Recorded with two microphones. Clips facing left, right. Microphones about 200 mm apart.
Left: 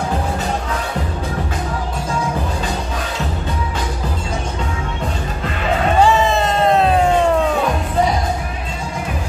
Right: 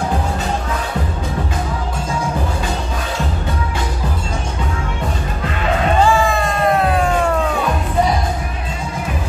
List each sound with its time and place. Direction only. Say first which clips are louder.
6.0 s music: left 1 dB; 20° left (ahead or behind)